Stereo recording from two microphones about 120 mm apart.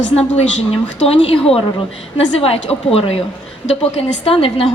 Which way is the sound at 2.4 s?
55° left (ahead or behind).